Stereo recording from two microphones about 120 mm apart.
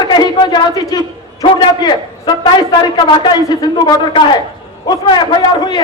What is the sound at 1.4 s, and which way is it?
A woman's voice, 35° left (ahead or behind).